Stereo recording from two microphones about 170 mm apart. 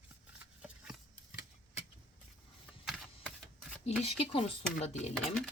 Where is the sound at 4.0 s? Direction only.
35° left (ahead or behind).